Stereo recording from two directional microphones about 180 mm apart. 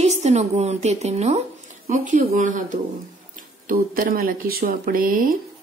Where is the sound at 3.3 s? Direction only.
50° right (ahead or behind).